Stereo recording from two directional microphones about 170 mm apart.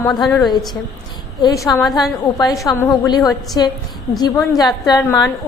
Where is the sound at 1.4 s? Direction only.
25° left (ahead or behind).